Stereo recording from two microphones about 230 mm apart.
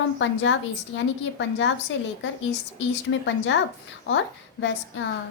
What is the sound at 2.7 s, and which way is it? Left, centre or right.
Speech, left.